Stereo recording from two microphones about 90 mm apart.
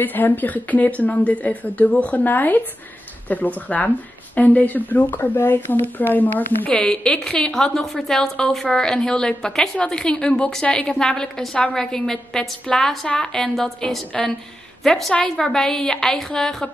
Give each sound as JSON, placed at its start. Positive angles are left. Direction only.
{"t": 0.0, "sound": "a woman's voice", "side_deg": 20}
{"t": 6.7, "sound": "a woman's voice", "side_deg": 10}